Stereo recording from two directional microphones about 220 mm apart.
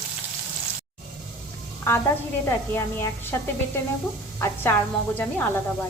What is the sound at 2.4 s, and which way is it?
A woman's voice, 10° left (ahead or behind).